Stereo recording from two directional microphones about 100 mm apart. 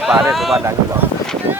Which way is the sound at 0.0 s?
5° right (ahead or behind).